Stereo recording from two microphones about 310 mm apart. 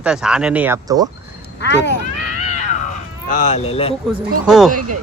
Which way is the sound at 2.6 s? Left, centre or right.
Left.